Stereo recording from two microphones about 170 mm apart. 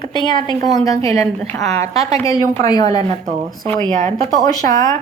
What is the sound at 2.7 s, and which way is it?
Speech, 25° left (ahead or behind).